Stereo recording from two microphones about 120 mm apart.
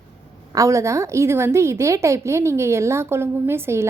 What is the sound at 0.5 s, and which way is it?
A woman's voice, 25° right (ahead or behind).